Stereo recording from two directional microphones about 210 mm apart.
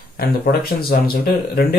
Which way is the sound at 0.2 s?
45° left (ahead or behind).